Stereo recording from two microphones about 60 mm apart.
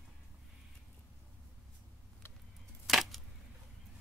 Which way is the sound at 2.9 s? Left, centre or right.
Centre.